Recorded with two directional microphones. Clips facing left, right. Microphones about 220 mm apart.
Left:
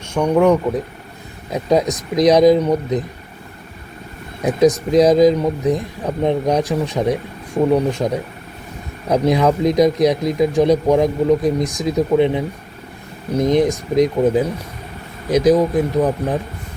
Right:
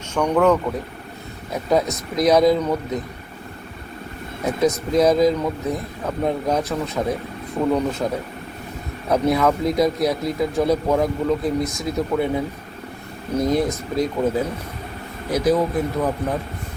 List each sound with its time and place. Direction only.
0.1 s speech: 10° left (ahead or behind)
4.4 s speech: 15° left (ahead or behind)
13.4 s speech: 20° left (ahead or behind)